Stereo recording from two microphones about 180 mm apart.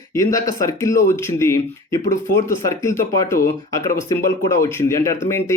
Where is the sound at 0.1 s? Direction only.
20° left (ahead or behind).